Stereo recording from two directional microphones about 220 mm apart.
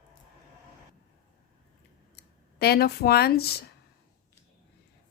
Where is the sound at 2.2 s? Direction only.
45° left (ahead or behind).